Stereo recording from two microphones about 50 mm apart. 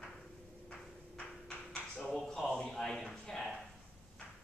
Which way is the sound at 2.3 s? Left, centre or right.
Centre.